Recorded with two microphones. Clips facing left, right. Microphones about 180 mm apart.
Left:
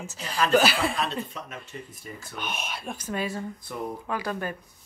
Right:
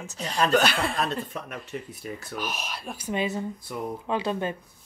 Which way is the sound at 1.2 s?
55° right (ahead or behind).